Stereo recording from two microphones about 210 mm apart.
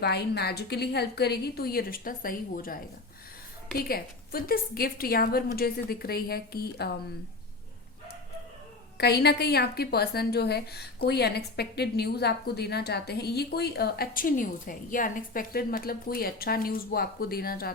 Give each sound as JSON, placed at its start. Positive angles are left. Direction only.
{"t": 0.0, "sound": "a woman's voice", "side_deg": 50}
{"t": 9.0, "sound": "a woman's voice", "side_deg": 50}